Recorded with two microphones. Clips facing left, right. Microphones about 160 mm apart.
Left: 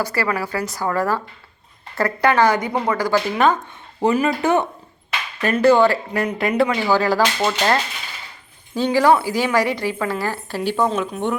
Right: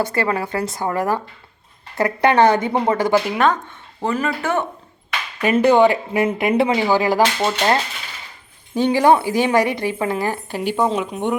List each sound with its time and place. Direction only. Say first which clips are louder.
0.0 s a woman's voice: right 2 dB; 25° right (ahead or behind)
3.3 s speech: even; centre (ahead or behind)
4.0 s speech: left 4 dB; 15° left (ahead or behind)
5.5 s a woman's voice: right 1 dB; 20° right (ahead or behind)